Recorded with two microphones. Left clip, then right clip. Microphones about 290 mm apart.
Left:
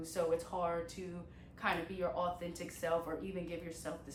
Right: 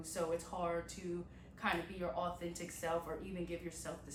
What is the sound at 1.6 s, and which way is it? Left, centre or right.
A woman's voice, centre.